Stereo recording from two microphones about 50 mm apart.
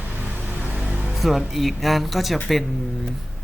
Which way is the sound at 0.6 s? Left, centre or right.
Right.